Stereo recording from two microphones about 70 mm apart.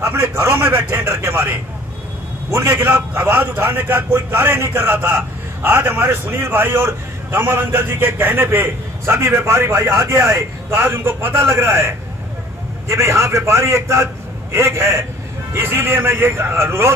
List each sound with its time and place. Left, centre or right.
0.0 s a man's voice: right